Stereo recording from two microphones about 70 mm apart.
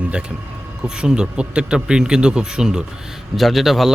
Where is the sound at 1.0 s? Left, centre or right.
Centre.